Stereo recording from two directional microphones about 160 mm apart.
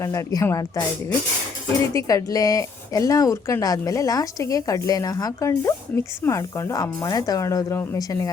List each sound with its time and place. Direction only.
0.0 s speech: 20° left (ahead or behind)